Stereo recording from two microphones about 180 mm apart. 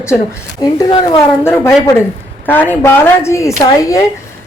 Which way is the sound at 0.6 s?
20° left (ahead or behind).